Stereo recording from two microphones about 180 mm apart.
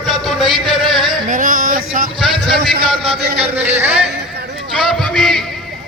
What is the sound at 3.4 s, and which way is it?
Speech, 10° right (ahead or behind).